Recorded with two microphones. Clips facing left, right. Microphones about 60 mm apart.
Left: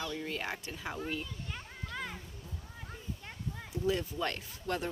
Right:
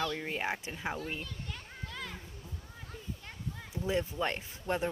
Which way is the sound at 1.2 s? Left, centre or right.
Centre.